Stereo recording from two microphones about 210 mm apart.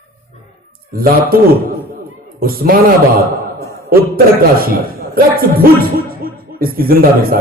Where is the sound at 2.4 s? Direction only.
45° right (ahead or behind).